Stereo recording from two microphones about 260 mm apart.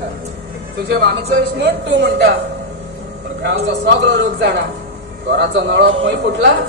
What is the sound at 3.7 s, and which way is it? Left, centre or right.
A man's voice, right.